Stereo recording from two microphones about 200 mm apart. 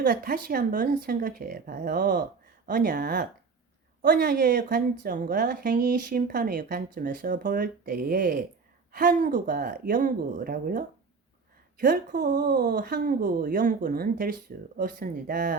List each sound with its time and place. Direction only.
0.0 s a woman's voice: 45° right (ahead or behind)